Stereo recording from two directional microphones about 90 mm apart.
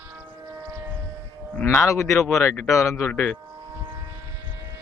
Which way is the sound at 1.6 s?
30° left (ahead or behind).